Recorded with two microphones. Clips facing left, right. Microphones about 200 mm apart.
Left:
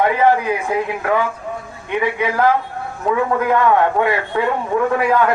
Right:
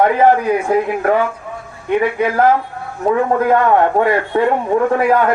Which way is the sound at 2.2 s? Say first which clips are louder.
Right 3 dB; 45° right (ahead or behind).